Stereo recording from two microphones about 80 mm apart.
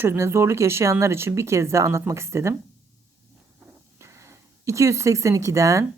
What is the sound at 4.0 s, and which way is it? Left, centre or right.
Speech, right.